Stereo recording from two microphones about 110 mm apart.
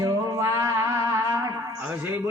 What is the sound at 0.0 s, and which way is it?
Music, 30° right (ahead or behind).